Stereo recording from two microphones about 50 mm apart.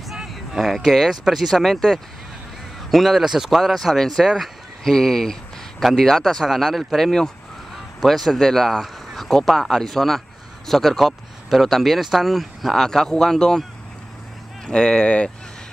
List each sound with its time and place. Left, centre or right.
0.1 s speech: centre
14.7 s speech: centre